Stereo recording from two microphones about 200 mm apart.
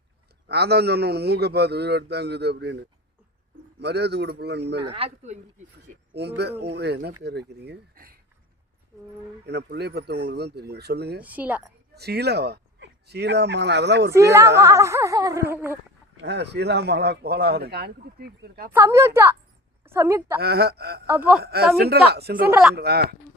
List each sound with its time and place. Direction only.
0.4 s speech: 55° right (ahead or behind)
4.9 s speech: 30° right (ahead or behind)
6.1 s speech: 55° right (ahead or behind)
9.5 s speech: 55° right (ahead or behind)
11.2 s speech: 10° right (ahead or behind)
11.9 s speech: 55° right (ahead or behind)
14.3 s speech: 15° right (ahead or behind)
16.2 s speech: 55° right (ahead or behind)
18.7 s a woman's voice: 15° right (ahead or behind)
20.4 s speech: 50° right (ahead or behind)
21.1 s speech: 5° right (ahead or behind)
21.4 s speech: 50° right (ahead or behind)
22.4 s speech: 10° right (ahead or behind)
22.7 s speech: 50° right (ahead or behind)